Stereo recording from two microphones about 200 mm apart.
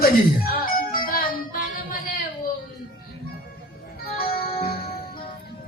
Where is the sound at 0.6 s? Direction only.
45° left (ahead or behind).